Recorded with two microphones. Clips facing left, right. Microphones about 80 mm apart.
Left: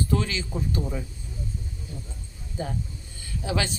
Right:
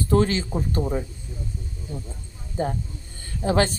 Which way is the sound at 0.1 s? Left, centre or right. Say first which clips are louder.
Right 6 dB; right.